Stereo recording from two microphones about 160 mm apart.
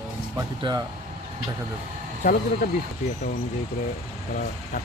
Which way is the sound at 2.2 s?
65° left (ahead or behind).